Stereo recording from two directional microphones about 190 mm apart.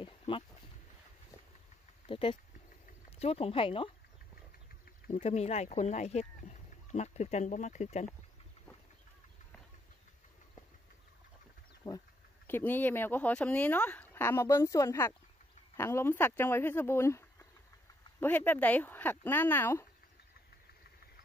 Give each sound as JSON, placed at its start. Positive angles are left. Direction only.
{"t": 0.0, "sound": "a sound", "side_deg": 25}
{"t": 2.0, "sound": "speech", "side_deg": 25}
{"t": 5.1, "sound": "speech", "side_deg": 35}
{"t": 11.8, "sound": "insect", "side_deg": 20}
{"t": 12.4, "sound": "speech", "side_deg": 10}